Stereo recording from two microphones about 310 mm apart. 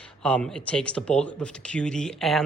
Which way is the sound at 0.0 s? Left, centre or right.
Centre.